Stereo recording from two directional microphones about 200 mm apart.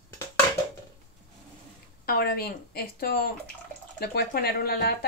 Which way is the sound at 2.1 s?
50° left (ahead or behind).